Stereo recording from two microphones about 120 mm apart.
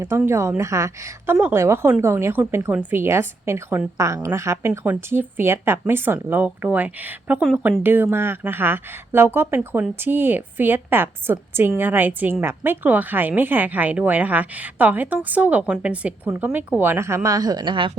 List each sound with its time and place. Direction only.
0.3 s a woman's voice: 25° right (ahead or behind)
9.6 s a woman's voice: 5° right (ahead or behind)
9.9 s a woman's voice: 15° right (ahead or behind); by 17.9 s 45° right (ahead or behind)